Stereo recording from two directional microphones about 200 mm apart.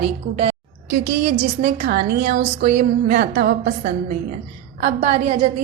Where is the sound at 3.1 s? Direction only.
55° right (ahead or behind).